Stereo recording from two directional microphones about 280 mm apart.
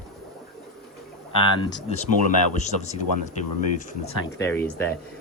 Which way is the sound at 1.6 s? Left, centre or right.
Centre.